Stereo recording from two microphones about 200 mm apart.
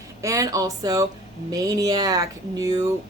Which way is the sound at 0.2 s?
15° right (ahead or behind).